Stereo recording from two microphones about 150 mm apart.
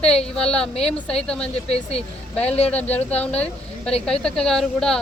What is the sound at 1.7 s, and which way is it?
Speech, 45° left (ahead or behind).